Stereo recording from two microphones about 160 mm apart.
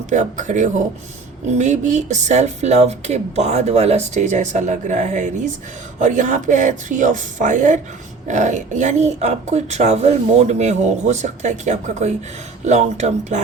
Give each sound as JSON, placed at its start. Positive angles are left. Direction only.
{"t": 0.1, "sound": "speech", "side_deg": -50}